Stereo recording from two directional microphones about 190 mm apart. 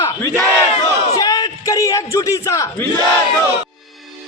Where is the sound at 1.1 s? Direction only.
20° left (ahead or behind).